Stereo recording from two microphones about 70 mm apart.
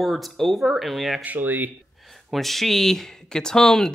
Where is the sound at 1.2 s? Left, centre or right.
Right.